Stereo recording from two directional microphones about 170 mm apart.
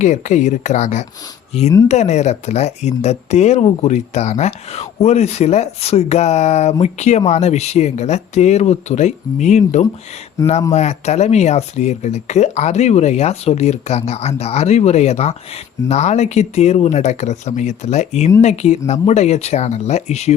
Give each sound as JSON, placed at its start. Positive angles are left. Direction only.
{"t": 0.0, "sound": "speech", "side_deg": 45}